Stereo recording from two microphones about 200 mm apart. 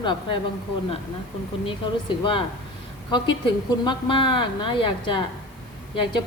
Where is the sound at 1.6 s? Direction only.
25° left (ahead or behind).